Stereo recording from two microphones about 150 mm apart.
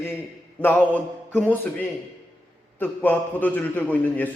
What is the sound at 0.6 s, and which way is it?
Speech, 15° left (ahead or behind).